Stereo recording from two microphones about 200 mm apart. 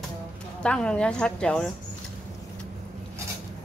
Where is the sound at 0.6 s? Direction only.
5° left (ahead or behind).